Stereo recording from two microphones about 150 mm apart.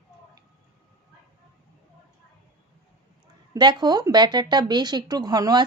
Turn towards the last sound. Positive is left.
turn(degrees=-25)  # may be behind; listen again after turning